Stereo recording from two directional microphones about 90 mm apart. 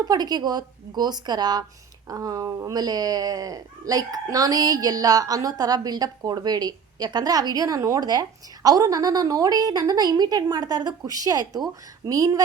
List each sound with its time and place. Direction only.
0.0 s speech: 50° right (ahead or behind)